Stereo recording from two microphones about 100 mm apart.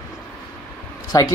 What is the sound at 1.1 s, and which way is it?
Speech, 35° left (ahead or behind).